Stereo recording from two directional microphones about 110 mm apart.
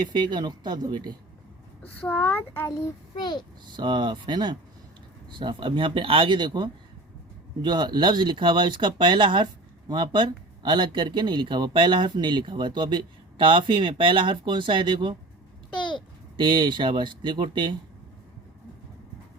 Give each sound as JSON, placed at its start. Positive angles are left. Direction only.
{"t": 0.0, "sound": "speech", "side_deg": -45}
{"t": 1.8, "sound": "a child's voice", "side_deg": 15}
{"t": 3.2, "sound": "a child's voice", "side_deg": 40}
{"t": 3.7, "sound": "speech", "side_deg": -45}
{"t": 15.7, "sound": "babbling", "side_deg": 45}
{"t": 16.4, "sound": "speech", "side_deg": -45}